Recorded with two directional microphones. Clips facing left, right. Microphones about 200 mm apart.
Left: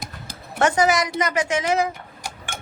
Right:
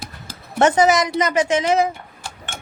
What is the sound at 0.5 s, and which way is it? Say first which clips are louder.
Speech: right 4 dB; 20° right (ahead or behind).